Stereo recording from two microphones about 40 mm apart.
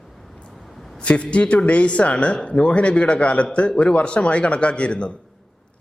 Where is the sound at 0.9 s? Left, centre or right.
Left.